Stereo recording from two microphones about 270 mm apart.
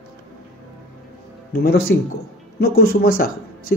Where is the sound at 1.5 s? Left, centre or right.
Left.